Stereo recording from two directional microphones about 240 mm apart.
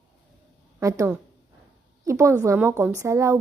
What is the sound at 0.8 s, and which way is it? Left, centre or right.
A woman's voice, centre.